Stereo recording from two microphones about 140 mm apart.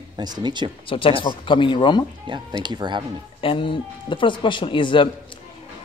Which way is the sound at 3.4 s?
40° left (ahead or behind).